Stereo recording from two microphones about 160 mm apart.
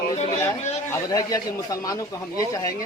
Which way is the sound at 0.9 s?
20° left (ahead or behind).